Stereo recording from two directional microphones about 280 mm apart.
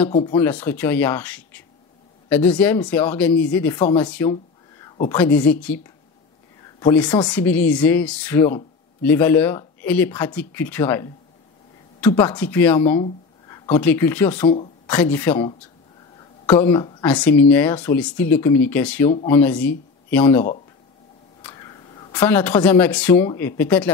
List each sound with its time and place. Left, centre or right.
0.2 s speech: centre
5.1 s speech: centre
6.8 s speech: centre
21.5 s a woman's voice: centre